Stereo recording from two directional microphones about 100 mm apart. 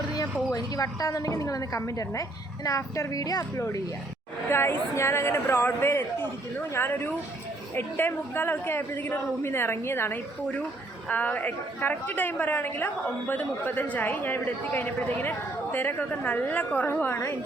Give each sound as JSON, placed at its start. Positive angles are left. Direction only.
{"t": 0.5, "sound": "a woman's voice", "side_deg": 35}
{"t": 4.4, "sound": "a man's voice", "side_deg": 25}